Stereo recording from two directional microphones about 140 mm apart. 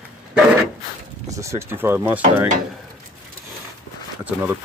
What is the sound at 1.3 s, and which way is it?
Speech, 20° right (ahead or behind).